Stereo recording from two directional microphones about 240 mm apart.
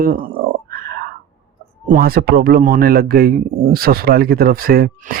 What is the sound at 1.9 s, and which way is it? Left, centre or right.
Speech, right.